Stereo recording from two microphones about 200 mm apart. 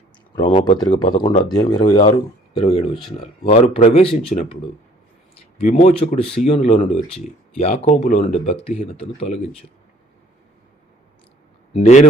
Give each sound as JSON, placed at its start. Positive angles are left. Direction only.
{"t": 0.3, "sound": "speech", "side_deg": 20}
{"t": 2.9, "sound": "speech", "side_deg": 0}
{"t": 3.4, "sound": "speech", "side_deg": 30}
{"t": 5.5, "sound": "speech", "side_deg": 40}
{"t": 11.7, "sound": "speech", "side_deg": 35}